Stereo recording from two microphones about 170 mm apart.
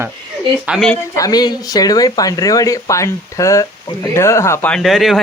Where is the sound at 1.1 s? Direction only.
20° left (ahead or behind).